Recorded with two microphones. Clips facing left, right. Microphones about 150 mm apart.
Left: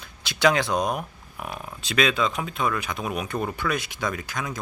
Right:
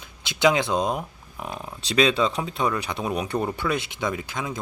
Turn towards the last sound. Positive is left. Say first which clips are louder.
# right 1 dB
turn(degrees=-25)  # may be behind; listen again after turning